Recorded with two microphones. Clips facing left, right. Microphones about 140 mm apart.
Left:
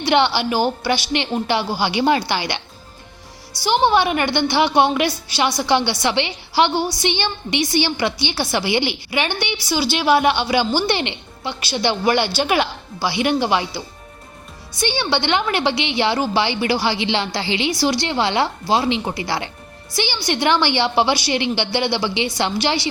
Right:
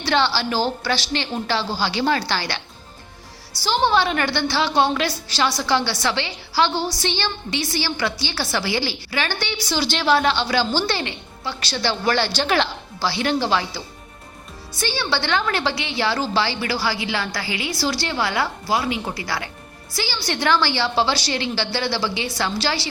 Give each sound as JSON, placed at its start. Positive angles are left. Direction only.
{"t": 0.0, "sound": "a woman's voice", "side_deg": 20}
{"t": 3.6, "sound": "a woman's voice", "side_deg": 15}